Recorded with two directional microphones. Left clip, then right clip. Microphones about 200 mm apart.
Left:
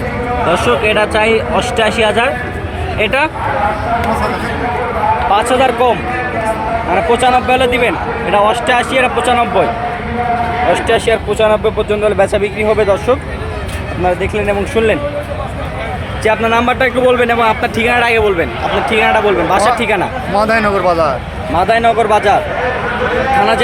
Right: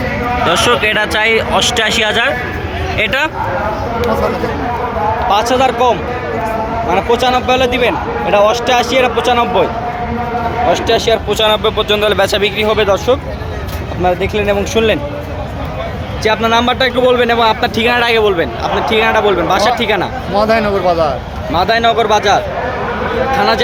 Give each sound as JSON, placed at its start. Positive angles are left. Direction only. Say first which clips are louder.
{"t": 0.5, "sound": "a man's voice", "louder": "even", "side_deg": 0}
{"t": 5.3, "sound": "a man's voice", "louder": "right 1 dB", "side_deg": 0}
{"t": 10.7, "sound": "a man's voice", "louder": "right 1 dB", "side_deg": 10}
{"t": 14.0, "sound": "a man's voice", "louder": "right 1 dB", "side_deg": 0}
{"t": 16.2, "sound": "a man's voice", "louder": "even", "side_deg": 5}
{"t": 23.4, "sound": "a man's voice", "louder": "even", "side_deg": 10}